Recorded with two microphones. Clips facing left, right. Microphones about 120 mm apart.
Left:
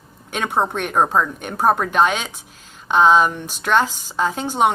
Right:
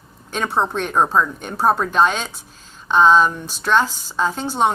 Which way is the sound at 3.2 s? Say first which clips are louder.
Even; 55° left (ahead or behind).